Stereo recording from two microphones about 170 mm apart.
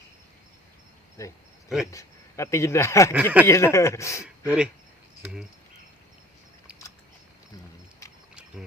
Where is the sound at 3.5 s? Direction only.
15° left (ahead or behind).